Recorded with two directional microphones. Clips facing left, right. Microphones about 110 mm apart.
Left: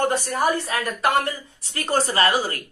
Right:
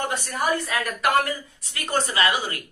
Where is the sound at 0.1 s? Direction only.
40° left (ahead or behind).